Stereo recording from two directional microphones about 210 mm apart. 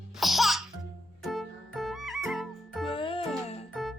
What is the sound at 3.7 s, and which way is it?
Music, centre (ahead or behind).